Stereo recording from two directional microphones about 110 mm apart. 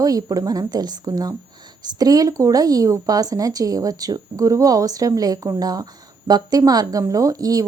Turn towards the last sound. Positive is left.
turn(degrees=-35)  # may be behind; listen again after turning